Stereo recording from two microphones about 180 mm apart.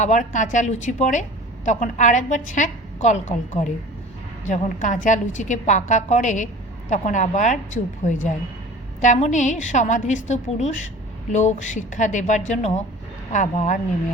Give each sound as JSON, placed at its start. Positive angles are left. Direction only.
{"t": 0.0, "sound": "a woman's voice", "side_deg": 45}